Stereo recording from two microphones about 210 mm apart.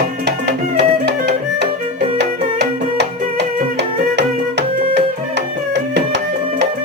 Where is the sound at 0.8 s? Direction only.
55° right (ahead or behind).